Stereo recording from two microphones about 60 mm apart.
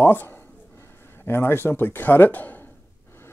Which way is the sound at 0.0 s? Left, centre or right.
Left.